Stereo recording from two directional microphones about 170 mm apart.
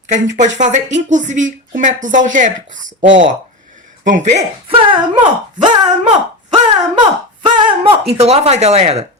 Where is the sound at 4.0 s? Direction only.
45° right (ahead or behind).